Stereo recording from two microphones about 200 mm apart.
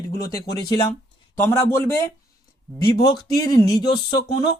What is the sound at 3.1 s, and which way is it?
Speech, 20° left (ahead or behind).